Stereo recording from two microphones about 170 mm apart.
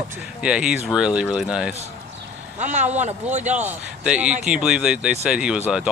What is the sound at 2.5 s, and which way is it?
Speech, 45° right (ahead or behind).